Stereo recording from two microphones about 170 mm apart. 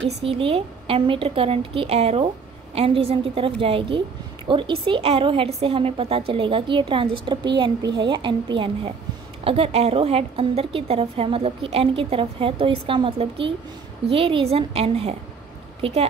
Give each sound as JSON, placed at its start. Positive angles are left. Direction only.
{"t": 0.2, "sound": "a woman's voice", "side_deg": -35}